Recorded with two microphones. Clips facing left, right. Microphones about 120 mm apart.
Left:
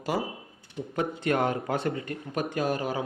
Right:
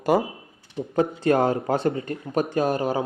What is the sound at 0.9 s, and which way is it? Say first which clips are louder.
A man's voice: right 6 dB; 35° right (ahead or behind).